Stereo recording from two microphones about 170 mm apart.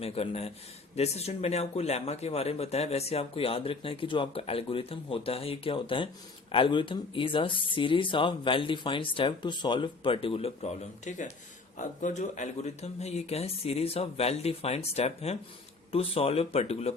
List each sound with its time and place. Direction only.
0.0 s speech: 35° left (ahead or behind)